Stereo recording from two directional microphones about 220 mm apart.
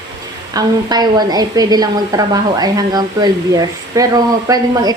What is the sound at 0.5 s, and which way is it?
A woman's voice, 20° right (ahead or behind).